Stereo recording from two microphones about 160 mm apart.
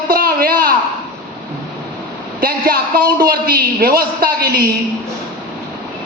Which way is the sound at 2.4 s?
70° right (ahead or behind).